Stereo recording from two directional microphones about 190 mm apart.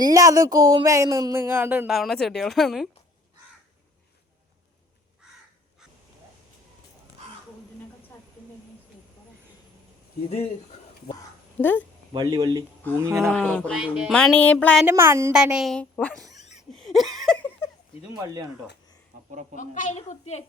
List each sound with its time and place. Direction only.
0.0 s speech: 20° right (ahead or behind)
1.9 s a woman's voice: centre (ahead or behind)
11.6 s speech: 10° left (ahead or behind)
12.1 s speech: 25° right (ahead or behind)
13.2 s a woman's voice: 5° left (ahead or behind)
14.8 s a woman's voice: 15° right (ahead or behind); by 16.2 s 5° left (ahead or behind)
16.4 s a sound: 35° left (ahead or behind)
16.7 s a sound: centre (ahead or behind)
19.5 s a woman's voice: 40° left (ahead or behind)